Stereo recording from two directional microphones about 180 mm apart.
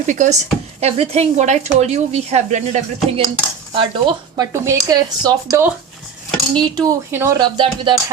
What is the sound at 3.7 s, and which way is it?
Speech, 25° right (ahead or behind).